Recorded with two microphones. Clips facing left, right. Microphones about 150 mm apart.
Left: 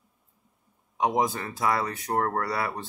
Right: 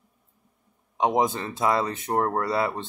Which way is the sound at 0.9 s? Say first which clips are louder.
Right 2 dB; 20° right (ahead or behind).